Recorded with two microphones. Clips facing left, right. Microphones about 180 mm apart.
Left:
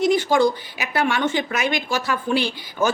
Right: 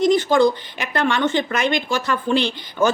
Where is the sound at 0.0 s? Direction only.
10° left (ahead or behind).